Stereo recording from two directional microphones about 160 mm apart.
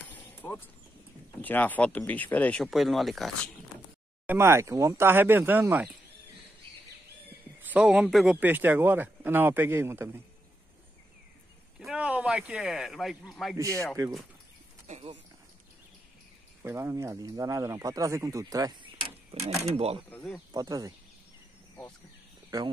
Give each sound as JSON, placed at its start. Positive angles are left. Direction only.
{"t": 0.1, "sound": "a sound", "side_deg": 15}
{"t": 1.4, "sound": "speech", "side_deg": 10}
{"t": 4.3, "sound": "a man's voice", "side_deg": -15}
{"t": 7.6, "sound": "a man's voice", "side_deg": -10}
{"t": 11.8, "sound": "speech", "side_deg": -5}
{"t": 14.9, "sound": "a sound", "side_deg": -40}
{"t": 16.6, "sound": "speech", "side_deg": -15}
{"t": 20.1, "sound": "speech", "side_deg": 15}
{"t": 20.5, "sound": "speech", "side_deg": -25}